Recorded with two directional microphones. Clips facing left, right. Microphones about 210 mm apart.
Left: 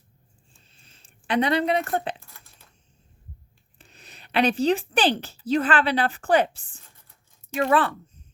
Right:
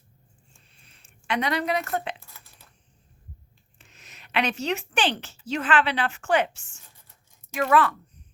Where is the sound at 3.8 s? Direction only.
35° left (ahead or behind).